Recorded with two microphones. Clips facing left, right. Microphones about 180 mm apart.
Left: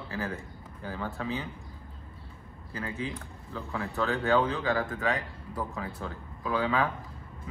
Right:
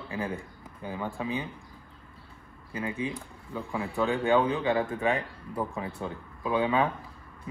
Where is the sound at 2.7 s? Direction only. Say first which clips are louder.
Right 3 dB; 15° right (ahead or behind).